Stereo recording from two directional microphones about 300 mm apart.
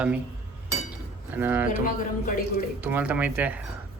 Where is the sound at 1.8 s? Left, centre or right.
Left.